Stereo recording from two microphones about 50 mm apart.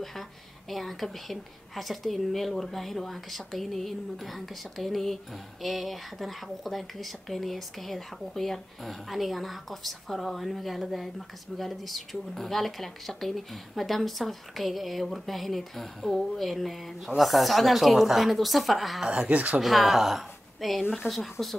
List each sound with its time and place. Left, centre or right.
0.7 s a woman's voice: centre
19.2 s speech: right
19.6 s a woman's voice: centre